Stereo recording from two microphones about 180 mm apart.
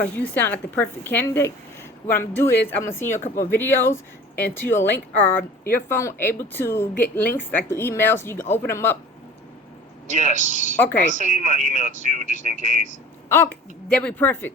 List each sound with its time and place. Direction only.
0.0 s speech: 10° left (ahead or behind)
10.1 s speech: 45° right (ahead or behind)
13.2 s throat clearing: 10° left (ahead or behind)
13.9 s speech: 5° left (ahead or behind)